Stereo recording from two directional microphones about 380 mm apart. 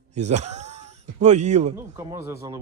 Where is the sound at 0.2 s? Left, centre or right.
Centre.